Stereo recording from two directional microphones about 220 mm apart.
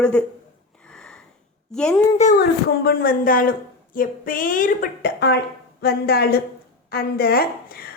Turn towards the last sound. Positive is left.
turn(degrees=45)  # may be behind; listen again after turning